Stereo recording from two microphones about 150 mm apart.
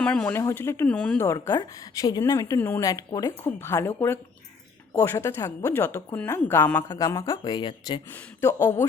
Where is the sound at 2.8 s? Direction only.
25° left (ahead or behind).